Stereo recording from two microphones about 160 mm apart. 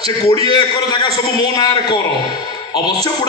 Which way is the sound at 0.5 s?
25° left (ahead or behind).